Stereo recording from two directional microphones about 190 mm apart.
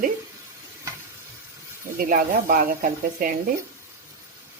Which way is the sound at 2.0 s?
50° right (ahead or behind).